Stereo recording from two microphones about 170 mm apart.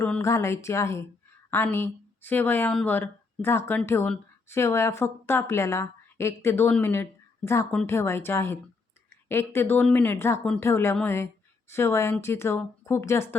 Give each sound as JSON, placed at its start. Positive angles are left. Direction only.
{"t": 0.0, "sound": "a woman's voice", "side_deg": 15}